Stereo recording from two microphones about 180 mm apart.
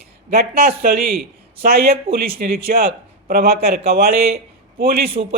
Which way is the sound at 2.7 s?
50° right (ahead or behind).